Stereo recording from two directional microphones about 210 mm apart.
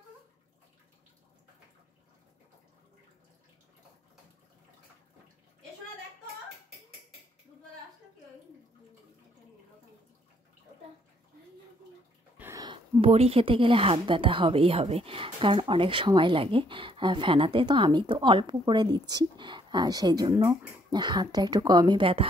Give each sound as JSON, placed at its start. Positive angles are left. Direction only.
{"t": 12.4, "sound": "a woman's voice", "side_deg": -15}